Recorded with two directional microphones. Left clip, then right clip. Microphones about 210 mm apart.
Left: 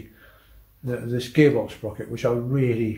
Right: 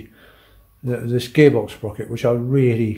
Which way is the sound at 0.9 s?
45° right (ahead or behind).